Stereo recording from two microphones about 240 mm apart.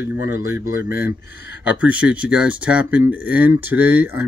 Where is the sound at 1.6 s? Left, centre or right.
Centre.